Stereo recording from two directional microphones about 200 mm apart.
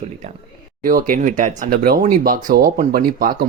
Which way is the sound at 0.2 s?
35° right (ahead or behind).